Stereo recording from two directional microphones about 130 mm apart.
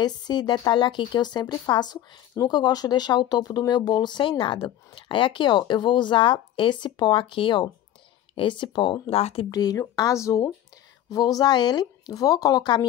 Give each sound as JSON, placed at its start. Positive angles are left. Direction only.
{"t": 0.0, "sound": "speech", "side_deg": 30}
{"t": 9.5, "sound": "speech", "side_deg": 30}